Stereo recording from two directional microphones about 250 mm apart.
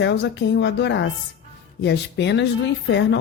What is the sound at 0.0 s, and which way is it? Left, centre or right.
Speech, left.